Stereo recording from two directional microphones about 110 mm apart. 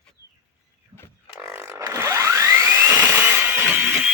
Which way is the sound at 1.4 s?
25° right (ahead or behind).